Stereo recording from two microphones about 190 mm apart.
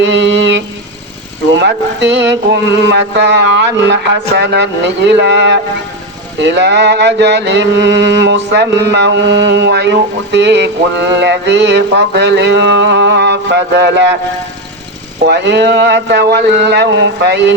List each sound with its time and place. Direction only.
0.0 s a sound: 70° right (ahead or behind)
1.5 s mantra: 65° right (ahead or behind)
15.3 s mantra: 65° right (ahead or behind)